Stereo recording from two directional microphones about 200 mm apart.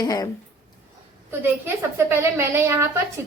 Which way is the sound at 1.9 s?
10° right (ahead or behind).